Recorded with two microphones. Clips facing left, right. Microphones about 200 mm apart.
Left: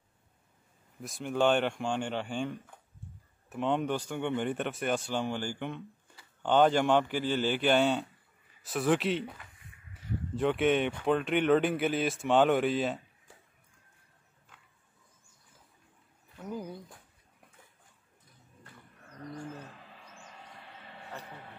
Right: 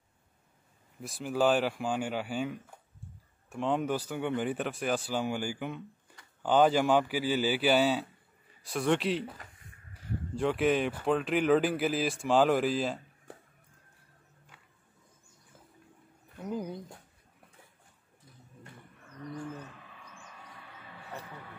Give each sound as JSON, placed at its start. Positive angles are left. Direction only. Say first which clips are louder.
{"t": 1.0, "sound": "speech", "louder": "even", "side_deg": 0}
{"t": 13.3, "sound": "music", "louder": "right 10 dB", "side_deg": -60}
{"t": 16.3, "sound": "bird", "louder": "right 3 dB", "side_deg": -20}
{"t": 20.5, "sound": "a sound", "louder": "even", "side_deg": 30}